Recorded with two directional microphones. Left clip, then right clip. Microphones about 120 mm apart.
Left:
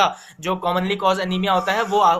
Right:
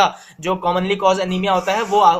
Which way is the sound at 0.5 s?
20° right (ahead or behind).